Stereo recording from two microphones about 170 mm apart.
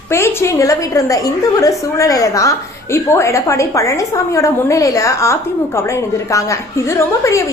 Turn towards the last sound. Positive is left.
turn(degrees=15)  # may be behind; listen again after turning